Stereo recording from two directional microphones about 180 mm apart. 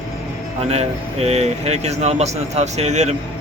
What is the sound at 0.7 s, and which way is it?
A man's voice, 35° right (ahead or behind).